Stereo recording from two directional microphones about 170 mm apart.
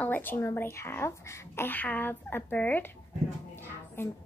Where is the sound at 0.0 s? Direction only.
10° left (ahead or behind).